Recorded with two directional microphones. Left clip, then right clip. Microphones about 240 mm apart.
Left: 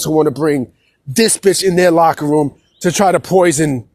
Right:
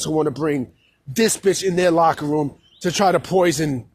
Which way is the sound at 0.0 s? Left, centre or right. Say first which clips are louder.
Left 7 dB; left.